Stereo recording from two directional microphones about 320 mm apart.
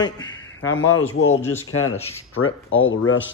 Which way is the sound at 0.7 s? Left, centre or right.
Left.